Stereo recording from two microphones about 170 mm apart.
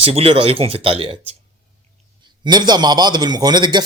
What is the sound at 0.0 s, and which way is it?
Speech, 35° right (ahead or behind).